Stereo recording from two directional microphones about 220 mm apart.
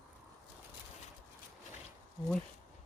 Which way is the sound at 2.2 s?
20° left (ahead or behind).